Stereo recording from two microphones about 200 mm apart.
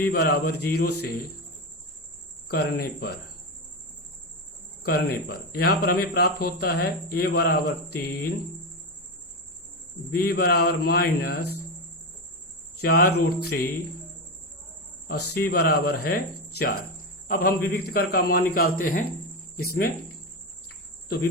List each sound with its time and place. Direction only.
0.0 s speech: 50° left (ahead or behind)
2.5 s speech: 50° left (ahead or behind)
4.8 s speech: 50° left (ahead or behind)
10.1 s speech: 50° left (ahead or behind)
12.8 s cricket: 55° left (ahead or behind)
13.4 s speech: 55° left (ahead or behind)
15.0 s speech: 50° left (ahead or behind)
17.2 s speech: 45° left (ahead or behind)